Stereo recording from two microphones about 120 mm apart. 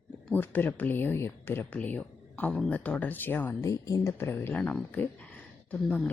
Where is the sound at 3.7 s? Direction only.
30° left (ahead or behind); by 6.1 s 10° left (ahead or behind).